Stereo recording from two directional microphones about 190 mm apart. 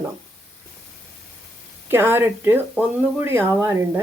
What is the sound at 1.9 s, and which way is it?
Speech, 10° right (ahead or behind).